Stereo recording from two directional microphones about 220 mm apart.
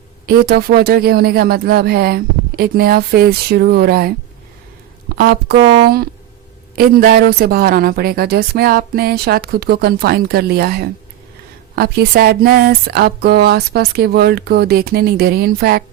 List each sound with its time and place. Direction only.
0.3 s a woman's voice: 45° right (ahead or behind)
5.5 s speech: 20° right (ahead or behind)
5.8 s a woman's voice: 45° right (ahead or behind)